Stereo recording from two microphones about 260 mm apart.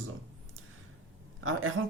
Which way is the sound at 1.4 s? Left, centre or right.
Right.